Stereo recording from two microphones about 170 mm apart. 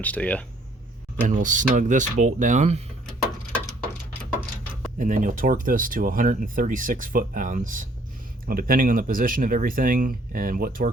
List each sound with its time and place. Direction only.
0.0 s speech: 10° left (ahead or behind)
1.3 s speech: 50° right (ahead or behind)
4.9 s speech: 50° right (ahead or behind)